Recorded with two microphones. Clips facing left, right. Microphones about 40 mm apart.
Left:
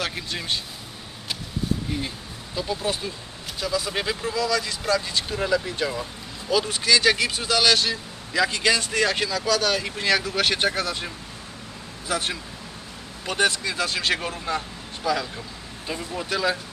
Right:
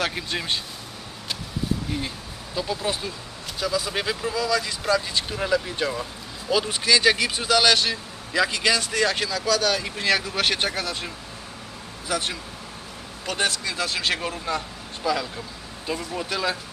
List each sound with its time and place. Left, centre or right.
0.3 s speech: centre
1.9 s speech: centre
13.3 s speech: left
13.7 s speech: centre